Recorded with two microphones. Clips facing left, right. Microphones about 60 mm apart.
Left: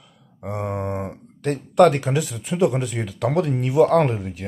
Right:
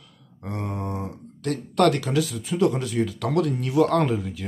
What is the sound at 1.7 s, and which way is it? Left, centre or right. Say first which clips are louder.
Speech: left 5 dB; centre.